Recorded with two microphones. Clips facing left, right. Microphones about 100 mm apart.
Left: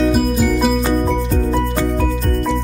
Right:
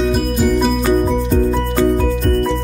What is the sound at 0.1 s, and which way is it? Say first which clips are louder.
Music: even; centre (ahead or behind).